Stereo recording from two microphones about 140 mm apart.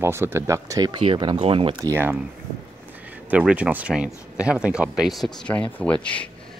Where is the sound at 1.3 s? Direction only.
45° right (ahead or behind).